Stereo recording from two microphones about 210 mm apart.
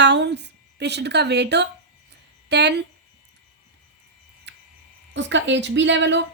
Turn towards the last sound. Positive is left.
turn(degrees=-60)  # may be behind; listen again after turning